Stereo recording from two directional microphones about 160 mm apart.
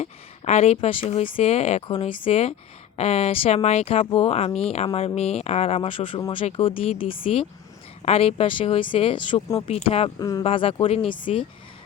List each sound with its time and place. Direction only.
0.0 s speech: 45° left (ahead or behind)
10.2 s speech: 20° left (ahead or behind)
10.4 s speech: 35° left (ahead or behind)